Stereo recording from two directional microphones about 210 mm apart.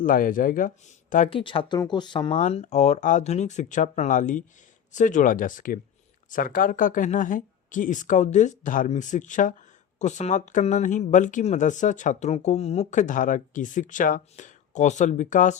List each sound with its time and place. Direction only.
0.0 s speech: 40° left (ahead or behind)
1.1 s speech: 30° left (ahead or behind)